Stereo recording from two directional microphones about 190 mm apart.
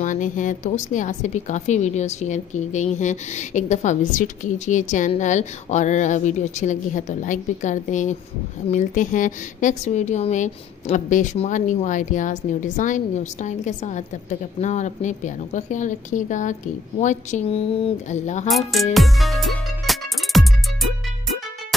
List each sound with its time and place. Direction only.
0.0 s a woman's voice: 40° left (ahead or behind)
18.5 s speech: centre (ahead or behind)
18.9 s music: centre (ahead or behind)